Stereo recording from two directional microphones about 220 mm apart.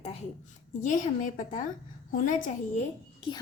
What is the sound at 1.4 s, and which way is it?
Speech, 35° left (ahead or behind).